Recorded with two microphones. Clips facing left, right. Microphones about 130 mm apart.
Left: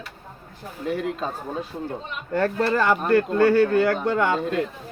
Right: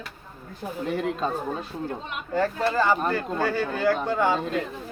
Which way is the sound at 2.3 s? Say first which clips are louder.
Left 2 dB; 65° left (ahead or behind).